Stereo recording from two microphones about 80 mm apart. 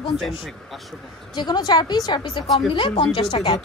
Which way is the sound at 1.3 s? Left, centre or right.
Left.